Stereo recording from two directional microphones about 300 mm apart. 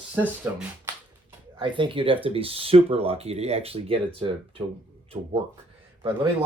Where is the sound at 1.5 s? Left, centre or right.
Centre.